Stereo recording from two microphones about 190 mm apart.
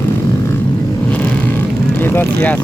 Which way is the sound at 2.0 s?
10° left (ahead or behind).